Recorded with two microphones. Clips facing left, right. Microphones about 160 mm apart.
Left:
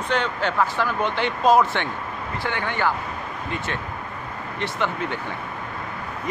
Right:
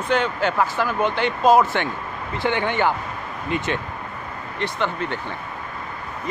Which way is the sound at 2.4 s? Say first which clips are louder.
Right 5 dB; 20° right (ahead or behind).